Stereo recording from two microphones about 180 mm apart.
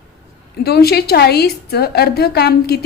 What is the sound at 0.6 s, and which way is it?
A woman's voice, 60° left (ahead or behind).